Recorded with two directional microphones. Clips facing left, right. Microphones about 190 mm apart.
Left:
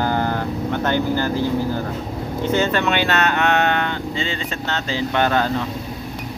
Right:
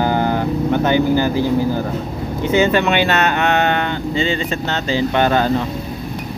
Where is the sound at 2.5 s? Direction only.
15° right (ahead or behind).